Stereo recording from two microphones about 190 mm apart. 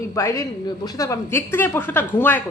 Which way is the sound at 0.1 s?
15° left (ahead or behind).